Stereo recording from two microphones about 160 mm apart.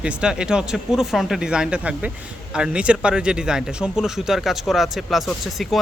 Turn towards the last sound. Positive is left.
turn(degrees=0)  # may be behind; listen again after turning